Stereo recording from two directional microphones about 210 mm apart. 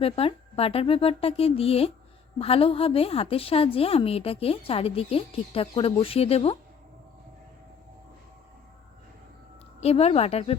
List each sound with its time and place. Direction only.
0.0 s a woman's voice: 25° left (ahead or behind)
9.8 s a woman's voice: 30° left (ahead or behind)